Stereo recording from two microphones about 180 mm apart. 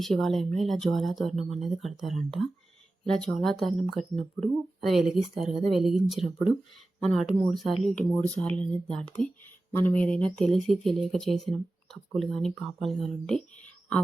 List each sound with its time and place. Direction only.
0.0 s speech: centre (ahead or behind)